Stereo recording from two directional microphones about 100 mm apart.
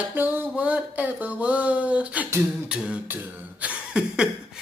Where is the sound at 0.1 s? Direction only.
20° right (ahead or behind).